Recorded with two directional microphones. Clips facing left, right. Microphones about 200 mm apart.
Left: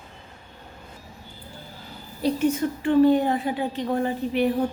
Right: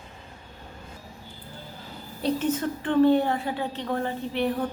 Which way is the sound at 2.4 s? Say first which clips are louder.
Left 4 dB; 10° left (ahead or behind).